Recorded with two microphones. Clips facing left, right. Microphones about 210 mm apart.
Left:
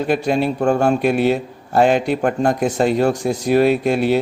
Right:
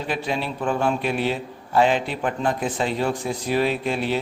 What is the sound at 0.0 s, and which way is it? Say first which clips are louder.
A man's voice: left 9 dB; 45° left (ahead or behind).